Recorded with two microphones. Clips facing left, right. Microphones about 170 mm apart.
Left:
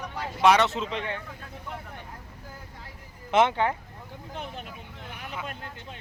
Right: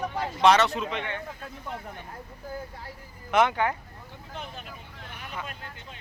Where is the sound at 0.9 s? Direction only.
35° left (ahead or behind).